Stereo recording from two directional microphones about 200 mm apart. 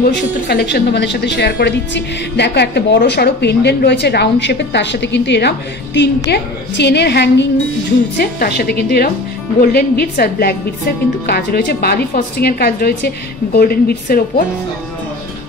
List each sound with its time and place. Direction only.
0.0 s a woman's voice: 50° left (ahead or behind)